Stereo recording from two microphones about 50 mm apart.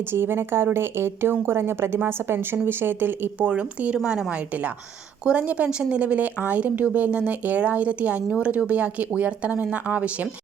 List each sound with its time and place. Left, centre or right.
0.1 s a woman's voice: right
3.3 s speech: right